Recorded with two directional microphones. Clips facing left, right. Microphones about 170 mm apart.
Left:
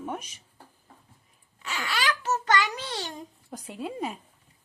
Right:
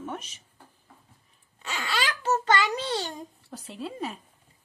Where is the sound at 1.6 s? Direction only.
30° right (ahead or behind).